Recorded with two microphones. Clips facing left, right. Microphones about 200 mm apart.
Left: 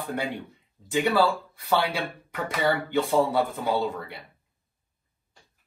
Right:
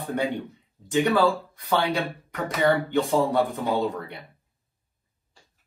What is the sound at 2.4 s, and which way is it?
Speech, centre (ahead or behind).